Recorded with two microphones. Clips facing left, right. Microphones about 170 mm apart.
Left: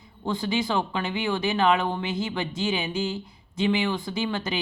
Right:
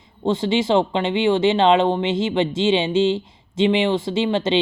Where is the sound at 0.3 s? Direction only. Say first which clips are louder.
Right 8 dB; 25° right (ahead or behind).